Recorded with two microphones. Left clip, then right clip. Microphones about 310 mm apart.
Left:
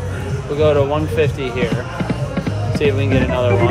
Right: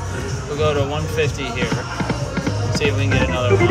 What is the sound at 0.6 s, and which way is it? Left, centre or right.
Speech, centre.